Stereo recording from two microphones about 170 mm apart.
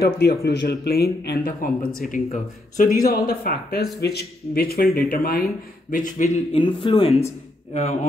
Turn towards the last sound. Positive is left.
turn(degrees=40)  # may be behind; listen again after turning